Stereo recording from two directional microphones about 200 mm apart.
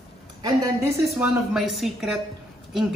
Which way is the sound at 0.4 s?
20° right (ahead or behind).